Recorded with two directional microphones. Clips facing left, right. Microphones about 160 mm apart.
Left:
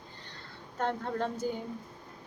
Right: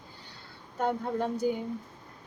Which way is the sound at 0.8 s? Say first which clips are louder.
Right 3 dB; 10° right (ahead or behind).